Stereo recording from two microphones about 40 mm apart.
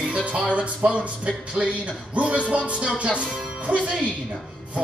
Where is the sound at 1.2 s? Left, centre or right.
Right.